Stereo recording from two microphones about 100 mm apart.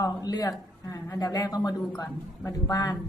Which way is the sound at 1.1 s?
35° left (ahead or behind).